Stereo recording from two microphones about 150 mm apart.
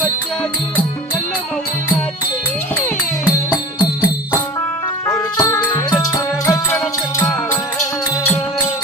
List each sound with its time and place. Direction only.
5.0 s music: 20° left (ahead or behind)